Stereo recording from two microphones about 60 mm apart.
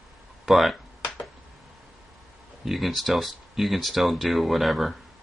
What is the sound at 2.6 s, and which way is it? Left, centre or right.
Speech, centre.